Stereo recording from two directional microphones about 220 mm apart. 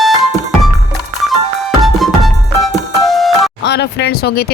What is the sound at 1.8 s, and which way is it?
Music, centre (ahead or behind).